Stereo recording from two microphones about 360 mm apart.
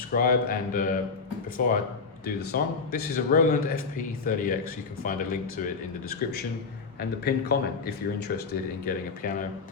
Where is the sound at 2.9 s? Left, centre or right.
Left.